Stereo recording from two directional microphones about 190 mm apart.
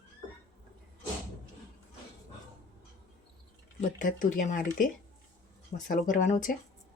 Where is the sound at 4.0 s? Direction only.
45° left (ahead or behind).